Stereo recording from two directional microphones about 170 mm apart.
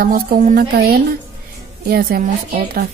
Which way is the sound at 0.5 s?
70° right (ahead or behind).